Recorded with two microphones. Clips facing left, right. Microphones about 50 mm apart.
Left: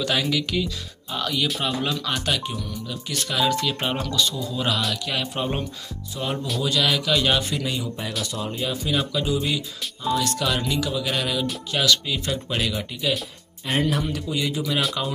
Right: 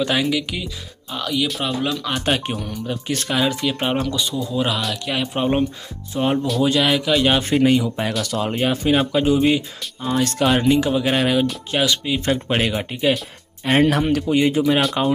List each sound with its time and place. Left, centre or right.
0.0 s speech: centre
2.4 s speech: right
3.4 s speech: centre
7.4 s speech: right
8.2 s speech: right
11.7 s speech: right
12.3 s speech: right
13.7 s speech: right
14.0 s speech: right